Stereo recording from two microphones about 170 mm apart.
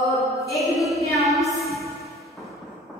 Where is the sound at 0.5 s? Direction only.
Centre (ahead or behind).